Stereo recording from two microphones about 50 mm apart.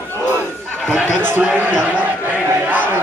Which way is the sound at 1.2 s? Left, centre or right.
Right.